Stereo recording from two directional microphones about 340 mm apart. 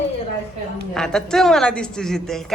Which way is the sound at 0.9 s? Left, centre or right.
Centre.